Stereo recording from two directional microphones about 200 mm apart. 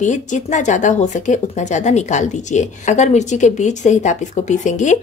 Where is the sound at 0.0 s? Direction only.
40° left (ahead or behind).